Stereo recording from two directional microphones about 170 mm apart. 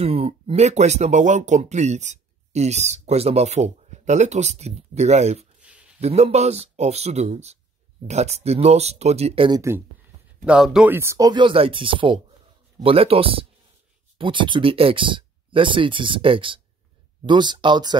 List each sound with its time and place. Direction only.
0.0 s speech: 35° right (ahead or behind)
5.6 s a sound: 5° right (ahead or behind)
5.9 s speech: 40° right (ahead or behind)
10.4 s speech: 5° right (ahead or behind); by 17.9 s 25° right (ahead or behind)